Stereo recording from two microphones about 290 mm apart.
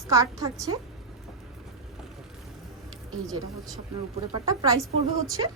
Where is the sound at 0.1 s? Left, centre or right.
Centre.